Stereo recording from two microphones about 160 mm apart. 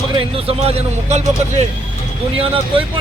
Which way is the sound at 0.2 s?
35° right (ahead or behind).